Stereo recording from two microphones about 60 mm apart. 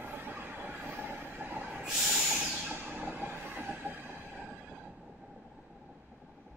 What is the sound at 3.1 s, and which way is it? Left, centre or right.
Train, right.